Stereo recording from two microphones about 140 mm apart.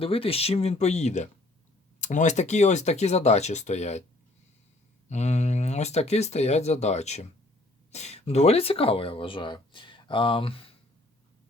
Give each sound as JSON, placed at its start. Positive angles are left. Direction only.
{"t": 0.0, "sound": "speech", "side_deg": 40}
{"t": 5.0, "sound": "speech", "side_deg": 55}